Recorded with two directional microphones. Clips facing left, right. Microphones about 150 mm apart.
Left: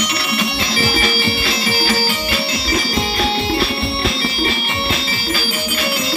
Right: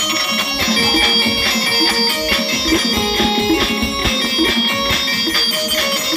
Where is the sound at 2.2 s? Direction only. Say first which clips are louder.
Right 2 dB; 85° right.